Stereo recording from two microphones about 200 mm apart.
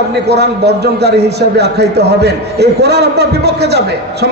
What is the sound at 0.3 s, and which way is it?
A man's voice, 55° right (ahead or behind).